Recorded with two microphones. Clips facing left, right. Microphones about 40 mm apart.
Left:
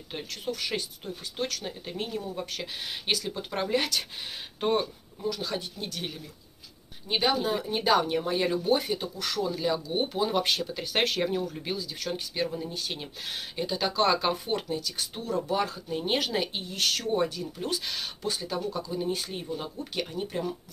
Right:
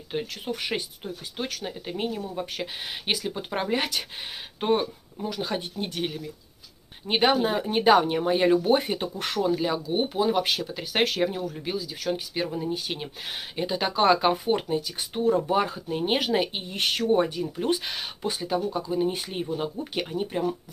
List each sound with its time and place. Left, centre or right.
0.1 s speech: centre
0.5 s speech: right
9.8 s speech: centre